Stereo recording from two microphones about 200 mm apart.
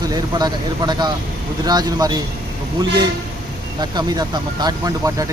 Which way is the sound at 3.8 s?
20° right (ahead or behind).